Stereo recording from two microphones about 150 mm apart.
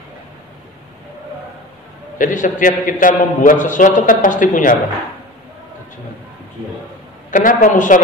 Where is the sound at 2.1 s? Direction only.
60° left (ahead or behind).